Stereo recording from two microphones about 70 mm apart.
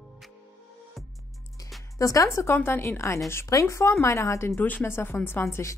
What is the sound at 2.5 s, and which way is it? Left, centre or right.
Speech, left.